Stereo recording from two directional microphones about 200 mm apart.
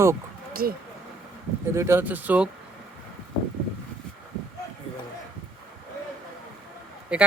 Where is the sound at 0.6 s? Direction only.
45° right (ahead or behind).